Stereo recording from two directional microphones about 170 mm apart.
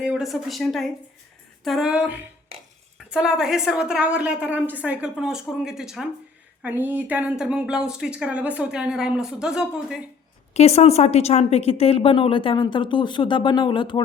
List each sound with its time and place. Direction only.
0.0 s a woman's voice: 5° right (ahead or behind)
10.5 s a woman's voice: 40° left (ahead or behind)